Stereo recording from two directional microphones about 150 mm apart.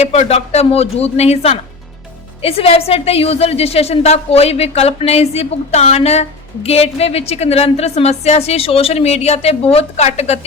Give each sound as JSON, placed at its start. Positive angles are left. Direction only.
{"t": 0.0, "sound": "a woman's voice", "side_deg": 45}